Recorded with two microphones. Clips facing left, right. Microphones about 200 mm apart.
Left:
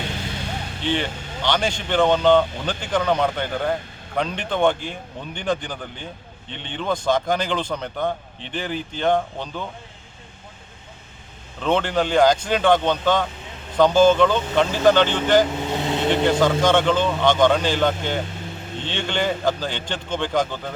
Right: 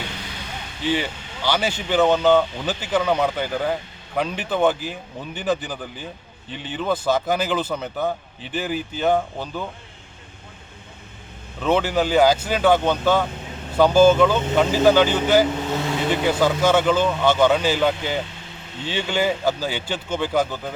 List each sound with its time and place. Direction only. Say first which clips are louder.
0.9 s speech: right 1 dB; 5° right (ahead or behind)
11.6 s speech: right 1 dB; 5° right (ahead or behind)
15.7 s vehicle: even; 20° left (ahead or behind)
16.0 s speech: left 2 dB; 5° right (ahead or behind)